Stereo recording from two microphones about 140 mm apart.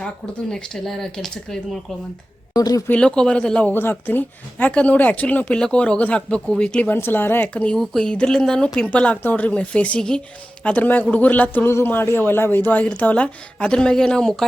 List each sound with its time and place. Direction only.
0.5 s speech: 5° left (ahead or behind)
2.5 s speech: 25° left (ahead or behind)
2.9 s speech: 5° left (ahead or behind)